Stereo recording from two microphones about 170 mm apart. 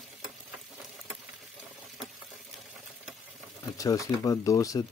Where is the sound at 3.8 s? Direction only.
20° left (ahead or behind).